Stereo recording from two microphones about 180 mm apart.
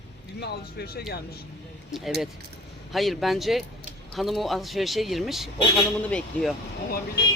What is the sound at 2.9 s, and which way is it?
Speech, centre (ahead or behind).